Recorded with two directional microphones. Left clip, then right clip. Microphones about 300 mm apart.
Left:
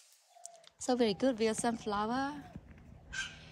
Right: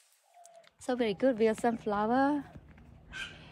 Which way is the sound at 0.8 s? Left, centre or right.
Centre.